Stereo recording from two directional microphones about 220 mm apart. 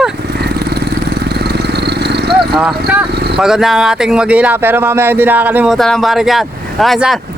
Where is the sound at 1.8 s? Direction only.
50° right (ahead or behind).